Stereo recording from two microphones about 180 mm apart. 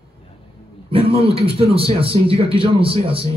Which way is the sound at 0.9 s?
30° right (ahead or behind).